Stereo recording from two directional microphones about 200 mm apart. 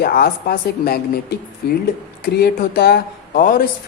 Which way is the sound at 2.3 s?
50° left (ahead or behind).